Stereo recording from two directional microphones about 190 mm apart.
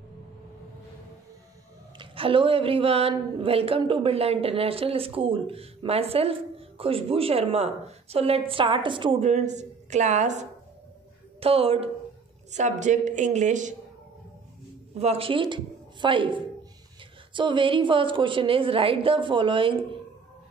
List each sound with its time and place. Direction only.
2.0 s a woman's voice: 30° right (ahead or behind)
15.0 s a woman's voice: 30° right (ahead or behind)